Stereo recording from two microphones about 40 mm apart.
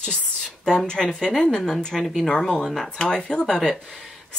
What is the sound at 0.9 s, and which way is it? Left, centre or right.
Speech, centre.